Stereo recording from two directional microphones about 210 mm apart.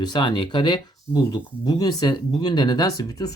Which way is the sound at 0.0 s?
20° left (ahead or behind).